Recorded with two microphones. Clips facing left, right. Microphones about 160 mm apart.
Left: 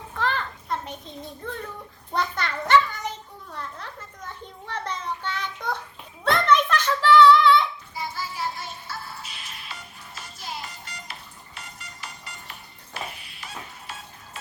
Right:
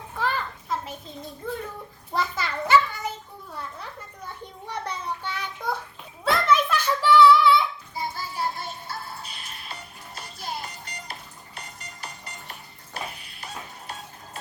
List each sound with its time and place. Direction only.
0.2 s children playing: 10° right (ahead or behind)
2.1 s a child's voice: 5° right (ahead or behind)
3.5 s a sound: 10° right (ahead or behind)
8.1 s music: 50° right (ahead or behind)
10.2 s music: 40° right (ahead or behind)